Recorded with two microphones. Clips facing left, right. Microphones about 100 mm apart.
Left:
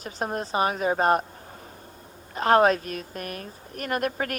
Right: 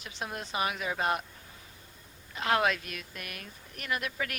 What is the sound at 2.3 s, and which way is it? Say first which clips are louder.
A woman's voice: left 9 dB; 40° left (ahead or behind).